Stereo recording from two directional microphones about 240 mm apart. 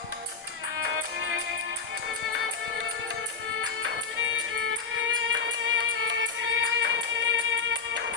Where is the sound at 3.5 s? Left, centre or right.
Right.